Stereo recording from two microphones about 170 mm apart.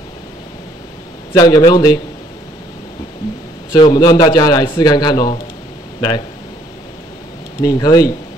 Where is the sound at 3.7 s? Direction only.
25° left (ahead or behind).